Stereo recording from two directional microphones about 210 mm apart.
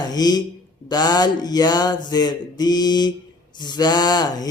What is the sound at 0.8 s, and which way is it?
Speech, 20° left (ahead or behind).